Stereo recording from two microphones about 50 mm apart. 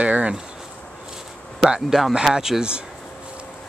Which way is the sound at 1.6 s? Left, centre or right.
Centre.